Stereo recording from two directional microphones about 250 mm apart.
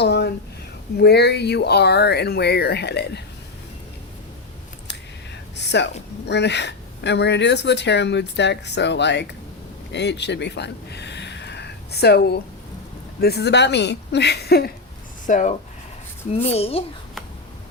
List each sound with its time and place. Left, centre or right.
0.0 s a sound: left
0.9 s speech: left
5.5 s speech: left
15.3 s a woman's voice: left